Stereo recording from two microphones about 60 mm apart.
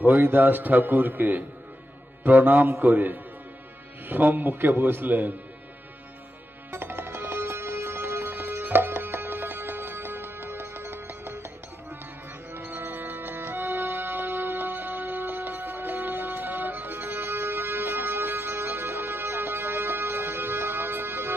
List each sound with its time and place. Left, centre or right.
0.2 s a man's voice: right
2.2 s music: right
4.1 s a man's voice: right
6.7 s music: right
12.5 s music: right